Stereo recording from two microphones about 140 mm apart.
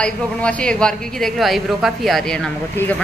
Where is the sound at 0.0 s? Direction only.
10° left (ahead or behind).